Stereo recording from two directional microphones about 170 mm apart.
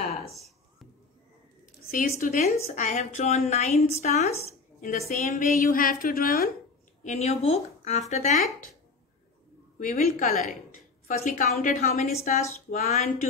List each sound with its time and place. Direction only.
1.9 s a woman's voice: 55° left (ahead or behind)
7.0 s a woman's voice: 40° left (ahead or behind)
9.8 s a woman's voice: 50° left (ahead or behind)